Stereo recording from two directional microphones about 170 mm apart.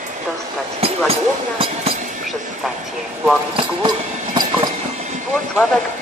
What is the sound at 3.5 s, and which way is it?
Clip-clop, 30° right (ahead or behind).